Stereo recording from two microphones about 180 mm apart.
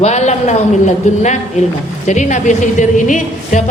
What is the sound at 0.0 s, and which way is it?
A man's voice, 40° left (ahead or behind).